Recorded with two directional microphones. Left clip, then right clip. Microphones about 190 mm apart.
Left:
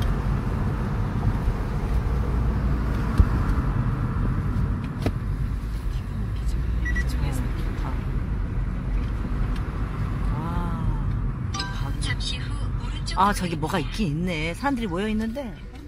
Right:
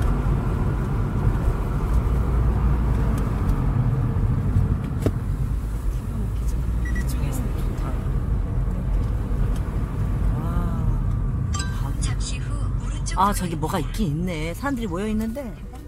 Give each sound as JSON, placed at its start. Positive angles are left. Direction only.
{"t": 13.2, "sound": "speech", "side_deg": 0}